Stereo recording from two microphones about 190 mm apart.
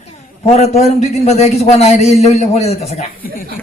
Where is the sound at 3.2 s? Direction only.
50° left (ahead or behind).